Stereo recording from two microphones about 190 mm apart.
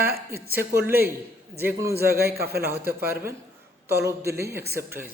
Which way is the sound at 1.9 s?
55° right (ahead or behind).